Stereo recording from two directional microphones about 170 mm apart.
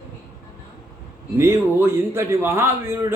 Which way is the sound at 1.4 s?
15° right (ahead or behind).